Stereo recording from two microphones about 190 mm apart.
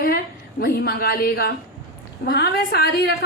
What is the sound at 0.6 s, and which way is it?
A woman's voice, 50° left (ahead or behind).